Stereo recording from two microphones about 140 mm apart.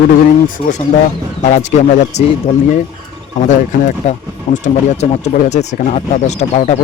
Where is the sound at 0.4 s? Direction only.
70° left (ahead or behind).